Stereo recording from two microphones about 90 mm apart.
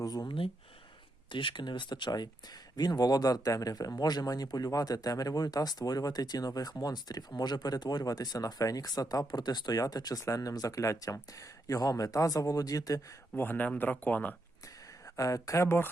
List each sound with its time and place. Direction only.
0.0 s speech: 40° left (ahead or behind)
0.3 s speech: 90° left
1.3 s speech: 65° left (ahead or behind); by 13.0 s 40° left (ahead or behind)
13.3 s speech: 25° left (ahead or behind)
15.0 s speech: 35° left (ahead or behind)